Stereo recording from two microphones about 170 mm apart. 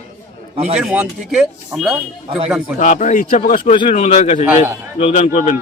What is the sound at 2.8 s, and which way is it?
Speech, 45° left (ahead or behind).